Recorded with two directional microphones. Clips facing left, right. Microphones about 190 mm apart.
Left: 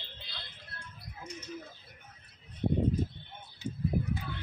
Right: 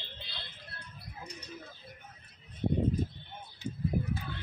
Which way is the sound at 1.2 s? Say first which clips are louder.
Left 2 dB; 35° right (ahead or behind).